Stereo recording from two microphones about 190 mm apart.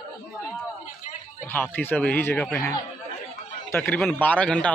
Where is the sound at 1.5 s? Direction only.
10° left (ahead or behind).